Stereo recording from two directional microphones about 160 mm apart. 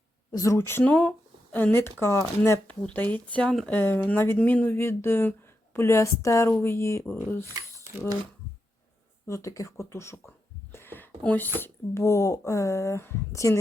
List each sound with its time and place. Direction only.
0.3 s speech: 20° left (ahead or behind)
9.2 s speech: 20° left (ahead or behind)
10.7 s a sound: 15° left (ahead or behind)
11.6 s speech: 15° left (ahead or behind)